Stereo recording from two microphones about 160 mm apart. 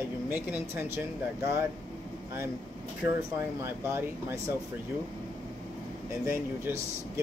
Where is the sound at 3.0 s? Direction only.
10° right (ahead or behind).